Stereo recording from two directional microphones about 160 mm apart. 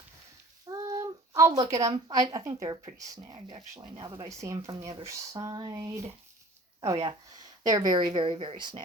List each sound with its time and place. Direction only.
0.7 s a woman's voice: 20° right (ahead or behind)